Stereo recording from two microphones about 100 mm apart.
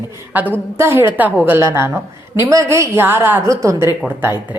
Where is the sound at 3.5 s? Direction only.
30° right (ahead or behind).